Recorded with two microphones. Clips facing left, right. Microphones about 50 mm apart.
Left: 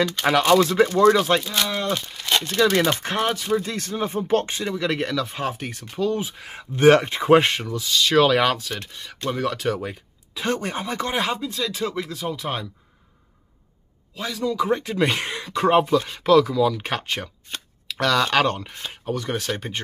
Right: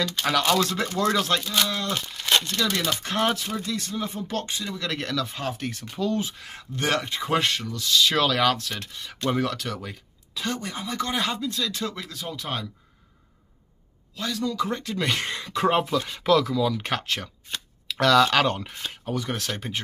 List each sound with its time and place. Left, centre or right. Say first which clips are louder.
0.2 s speech: left 5 dB; left
2.4 s speech: left 7 dB; left
3.3 s speech: left 2 dB; centre
3.6 s speech: left 3 dB; left
4.7 s speech: left 5 dB; centre
7.8 s speech: left 1 dB; centre
8.2 s speech: left 4 dB; centre
9.6 s speech: left 8 dB; left
10.4 s speech: left 5 dB; left; by 12.6 s centre
14.1 s speech: left 3 dB; centre
15.1 s speech: left 2 dB; centre